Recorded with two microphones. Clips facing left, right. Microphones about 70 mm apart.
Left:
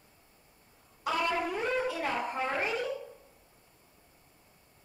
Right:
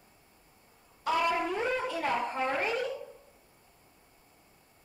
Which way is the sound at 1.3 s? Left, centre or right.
Centre.